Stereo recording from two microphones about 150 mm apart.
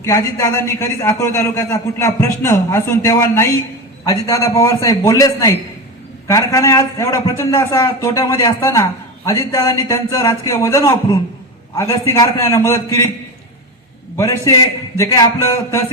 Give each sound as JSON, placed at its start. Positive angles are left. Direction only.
{"t": 0.0, "sound": "a man's voice", "side_deg": 20}
{"t": 14.2, "sound": "a man's voice", "side_deg": 20}